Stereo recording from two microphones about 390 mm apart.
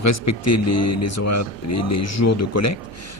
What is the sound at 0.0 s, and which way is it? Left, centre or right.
Speech, left.